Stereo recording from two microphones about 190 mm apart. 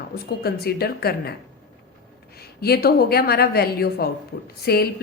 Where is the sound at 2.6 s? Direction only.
55° left (ahead or behind).